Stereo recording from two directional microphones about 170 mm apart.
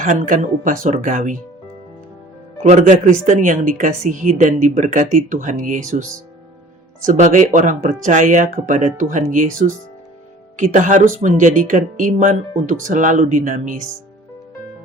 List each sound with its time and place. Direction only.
0.0 s speech: 50° right (ahead or behind)
2.6 s speech: 45° right (ahead or behind)